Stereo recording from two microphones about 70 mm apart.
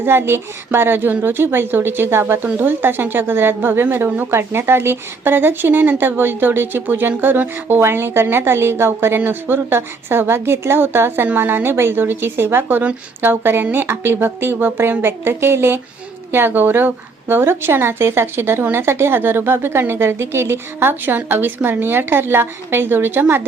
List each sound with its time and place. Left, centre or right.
0.0 s a woman's voice: right